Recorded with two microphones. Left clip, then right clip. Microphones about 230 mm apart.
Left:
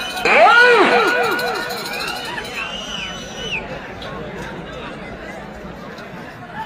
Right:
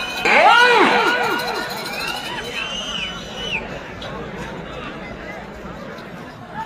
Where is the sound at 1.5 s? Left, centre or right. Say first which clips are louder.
Left 1 dB; centre.